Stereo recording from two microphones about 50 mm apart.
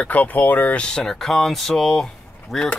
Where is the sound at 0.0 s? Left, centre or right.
Left.